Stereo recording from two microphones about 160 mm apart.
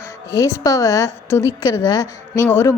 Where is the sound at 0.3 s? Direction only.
20° left (ahead or behind).